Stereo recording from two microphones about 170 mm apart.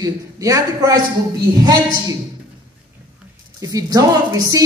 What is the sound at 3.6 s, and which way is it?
A man's voice, 20° right (ahead or behind).